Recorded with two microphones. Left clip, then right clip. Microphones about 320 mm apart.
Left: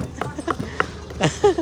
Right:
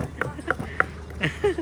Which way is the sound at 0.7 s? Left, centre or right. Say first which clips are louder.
Left 2 dB; centre.